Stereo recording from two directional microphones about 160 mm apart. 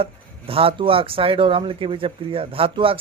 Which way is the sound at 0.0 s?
35° right (ahead or behind).